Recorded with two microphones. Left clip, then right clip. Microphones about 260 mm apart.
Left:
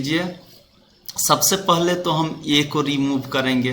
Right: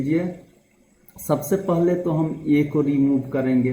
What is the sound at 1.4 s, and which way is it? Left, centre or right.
A man's voice, left.